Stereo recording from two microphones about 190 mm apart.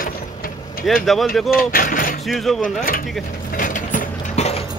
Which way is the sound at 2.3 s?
Centre (ahead or behind).